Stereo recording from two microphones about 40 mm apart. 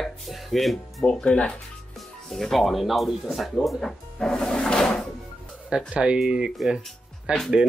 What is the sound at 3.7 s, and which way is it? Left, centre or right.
Music, centre.